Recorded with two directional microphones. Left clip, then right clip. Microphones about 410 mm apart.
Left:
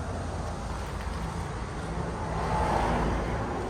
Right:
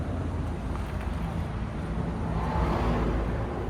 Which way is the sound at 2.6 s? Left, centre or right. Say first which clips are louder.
Left 3 dB; left.